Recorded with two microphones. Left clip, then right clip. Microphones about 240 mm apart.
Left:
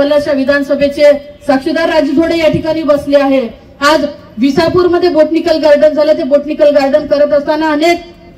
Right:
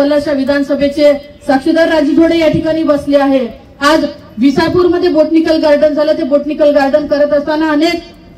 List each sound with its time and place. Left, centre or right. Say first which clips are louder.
0.0 s a man's voice: left 2 dB; left